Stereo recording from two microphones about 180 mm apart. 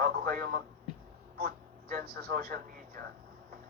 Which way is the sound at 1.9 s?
60° right (ahead or behind).